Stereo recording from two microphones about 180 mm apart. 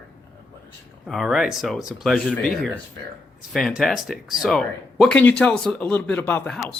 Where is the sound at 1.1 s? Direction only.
Centre (ahead or behind).